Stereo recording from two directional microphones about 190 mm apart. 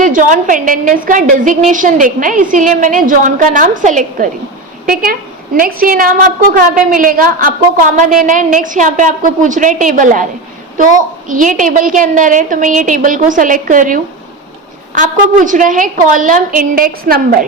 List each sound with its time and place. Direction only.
0.0 s a woman's voice: 40° right (ahead or behind)
5.5 s a woman's voice: 50° right (ahead or behind)